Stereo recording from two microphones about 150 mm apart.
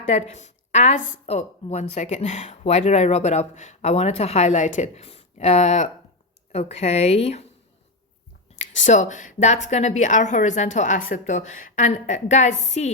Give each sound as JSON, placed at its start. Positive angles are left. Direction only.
{"t": 0.1, "sound": "a woman's voice", "side_deg": 50}
{"t": 8.5, "sound": "a woman's voice", "side_deg": 55}